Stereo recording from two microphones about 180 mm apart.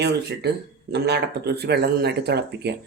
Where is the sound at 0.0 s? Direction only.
70° right (ahead or behind).